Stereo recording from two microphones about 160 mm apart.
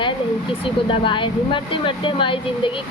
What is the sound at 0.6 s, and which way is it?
Speech, 35° left (ahead or behind).